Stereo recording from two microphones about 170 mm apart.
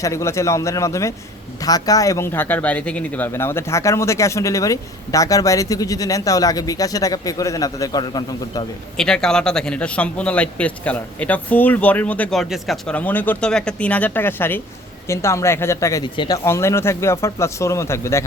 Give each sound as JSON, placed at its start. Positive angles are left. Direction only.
{"t": 0.0, "sound": "a man's voice", "side_deg": 15}
{"t": 9.0, "sound": "a man's voice", "side_deg": 5}